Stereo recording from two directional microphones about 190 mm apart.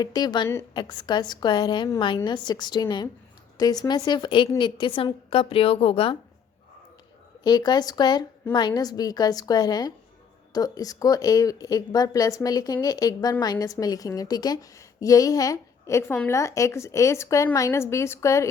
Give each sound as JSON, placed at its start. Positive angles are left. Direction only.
{"t": 0.0, "sound": "a woman's voice", "side_deg": 20}
{"t": 7.4, "sound": "a woman's voice", "side_deg": 20}